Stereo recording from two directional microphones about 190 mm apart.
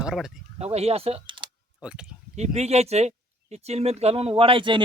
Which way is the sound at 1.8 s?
5° right (ahead or behind).